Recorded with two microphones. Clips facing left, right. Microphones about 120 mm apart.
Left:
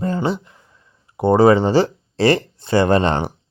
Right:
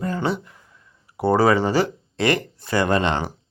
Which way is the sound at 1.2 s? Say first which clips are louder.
Left 5 dB; 20° left (ahead or behind).